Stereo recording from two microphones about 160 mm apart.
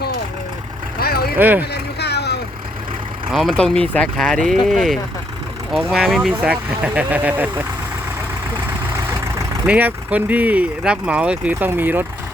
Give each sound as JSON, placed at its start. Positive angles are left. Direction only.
{"t": 0.9, "sound": "vehicle", "side_deg": 75}
{"t": 1.4, "sound": "speech", "side_deg": -10}
{"t": 1.7, "sound": "a sound", "side_deg": 90}
{"t": 3.3, "sound": "speech", "side_deg": 0}
{"t": 9.6, "sound": "speech", "side_deg": -10}